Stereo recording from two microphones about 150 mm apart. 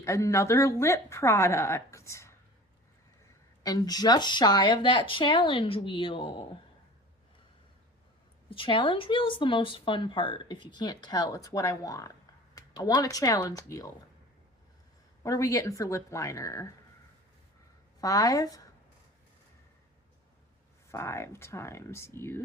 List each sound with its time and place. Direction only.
0.0 s speech: 20° left (ahead or behind)
3.6 s speech: 25° left (ahead or behind)
8.4 s speech: 35° left (ahead or behind)
15.2 s speech: 20° left (ahead or behind)
18.0 s speech: 25° left (ahead or behind)
20.9 s speech: 15° left (ahead or behind)